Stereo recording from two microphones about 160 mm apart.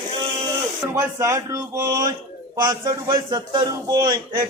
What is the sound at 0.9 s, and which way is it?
A man's voice, 15° right (ahead or behind).